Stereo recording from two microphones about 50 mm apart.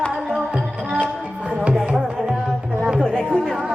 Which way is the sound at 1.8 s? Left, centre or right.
Right.